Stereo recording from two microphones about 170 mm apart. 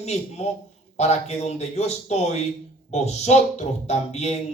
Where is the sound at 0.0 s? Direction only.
40° left (ahead or behind).